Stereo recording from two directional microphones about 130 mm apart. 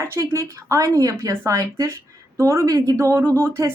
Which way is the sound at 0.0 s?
20° right (ahead or behind).